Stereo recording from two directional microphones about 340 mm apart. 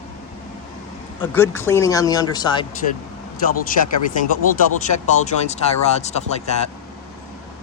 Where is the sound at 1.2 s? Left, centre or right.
Centre.